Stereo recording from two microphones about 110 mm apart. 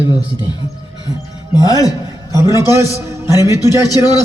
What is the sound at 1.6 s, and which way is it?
Speech, 30° left (ahead or behind).